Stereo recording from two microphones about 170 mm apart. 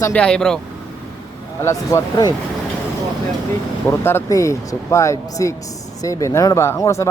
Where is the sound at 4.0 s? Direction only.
15° left (ahead or behind).